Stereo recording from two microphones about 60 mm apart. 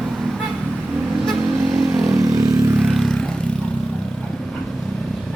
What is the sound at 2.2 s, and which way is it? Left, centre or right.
Vehicle, right.